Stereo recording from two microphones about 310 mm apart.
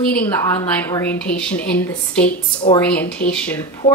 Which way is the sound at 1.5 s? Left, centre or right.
Left.